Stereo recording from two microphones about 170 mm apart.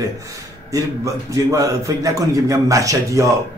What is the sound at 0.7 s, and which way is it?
A man's voice, 20° right (ahead or behind).